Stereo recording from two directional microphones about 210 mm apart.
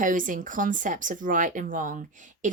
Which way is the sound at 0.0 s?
40° right (ahead or behind).